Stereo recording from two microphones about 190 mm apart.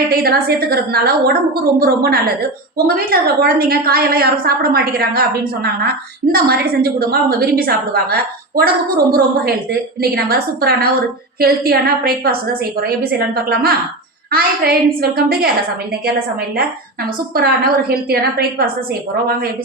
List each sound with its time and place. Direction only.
0.1 s a woman's voice: 55° right (ahead or behind)
6.3 s a woman's voice: 55° right (ahead or behind)
17.3 s a woman's voice: 50° right (ahead or behind)